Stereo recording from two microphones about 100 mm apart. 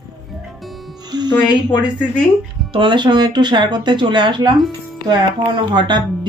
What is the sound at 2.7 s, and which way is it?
Speech, 55° right (ahead or behind).